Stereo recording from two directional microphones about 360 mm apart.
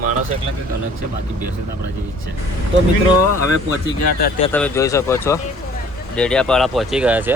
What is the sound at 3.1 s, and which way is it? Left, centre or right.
Speech, right.